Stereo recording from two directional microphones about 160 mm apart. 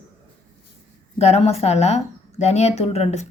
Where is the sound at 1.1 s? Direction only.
40° left (ahead or behind).